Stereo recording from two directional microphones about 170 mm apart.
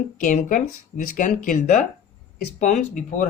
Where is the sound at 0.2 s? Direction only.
50° left (ahead or behind).